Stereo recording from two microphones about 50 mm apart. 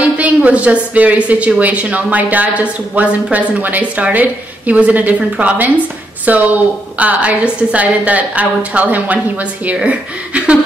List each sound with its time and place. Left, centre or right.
0.0 s a woman's voice: right